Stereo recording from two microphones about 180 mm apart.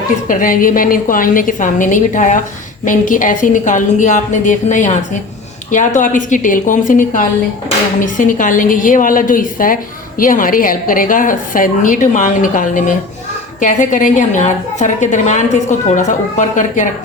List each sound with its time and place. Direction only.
0.3 s a woman's voice: 50° left (ahead or behind)